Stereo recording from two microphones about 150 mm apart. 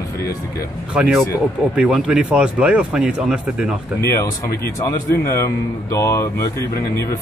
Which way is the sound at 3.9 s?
20° left (ahead or behind).